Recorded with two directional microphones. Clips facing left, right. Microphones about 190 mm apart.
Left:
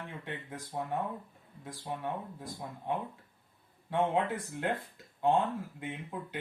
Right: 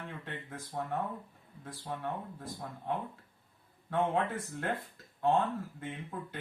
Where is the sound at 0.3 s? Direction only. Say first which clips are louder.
Left 2 dB; 15° left (ahead or behind).